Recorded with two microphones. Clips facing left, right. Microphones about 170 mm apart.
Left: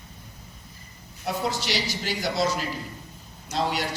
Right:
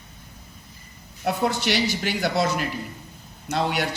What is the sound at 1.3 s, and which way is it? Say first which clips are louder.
A man's voice: right 5 dB; 60° right (ahead or behind).